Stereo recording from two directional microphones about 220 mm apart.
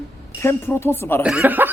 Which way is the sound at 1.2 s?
5° right (ahead or behind).